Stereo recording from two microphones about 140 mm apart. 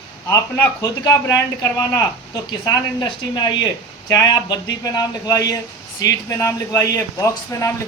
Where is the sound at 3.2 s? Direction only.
35° left (ahead or behind).